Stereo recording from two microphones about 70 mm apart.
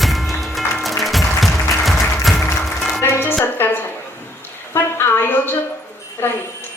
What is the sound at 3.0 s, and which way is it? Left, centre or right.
Music, left.